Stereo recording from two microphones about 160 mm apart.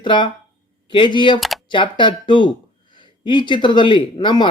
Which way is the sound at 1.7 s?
30° left (ahead or behind).